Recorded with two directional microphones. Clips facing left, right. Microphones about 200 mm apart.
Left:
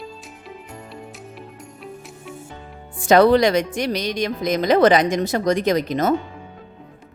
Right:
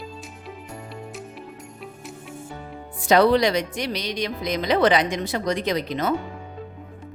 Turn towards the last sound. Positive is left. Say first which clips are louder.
# left 5 dB
turn(degrees=45)  # may be behind; listen again after turning